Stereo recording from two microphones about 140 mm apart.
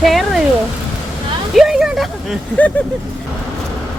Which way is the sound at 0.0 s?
Centre (ahead or behind).